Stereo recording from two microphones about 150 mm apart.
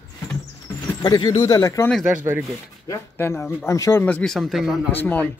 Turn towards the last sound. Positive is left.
turn(degrees=10)  # may be behind; listen again after turning